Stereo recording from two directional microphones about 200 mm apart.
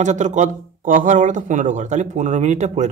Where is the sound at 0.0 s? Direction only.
35° right (ahead or behind).